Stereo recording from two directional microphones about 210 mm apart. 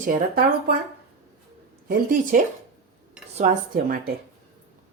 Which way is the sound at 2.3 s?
40° right (ahead or behind).